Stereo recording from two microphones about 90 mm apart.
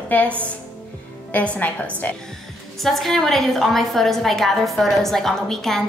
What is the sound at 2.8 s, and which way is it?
A woman's voice, centre (ahead or behind).